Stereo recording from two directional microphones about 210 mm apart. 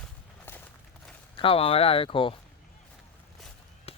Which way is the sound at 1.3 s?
25° left (ahead or behind).